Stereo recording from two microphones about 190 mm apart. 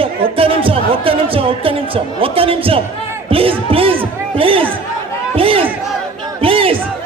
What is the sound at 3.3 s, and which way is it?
Music, 30° right (ahead or behind).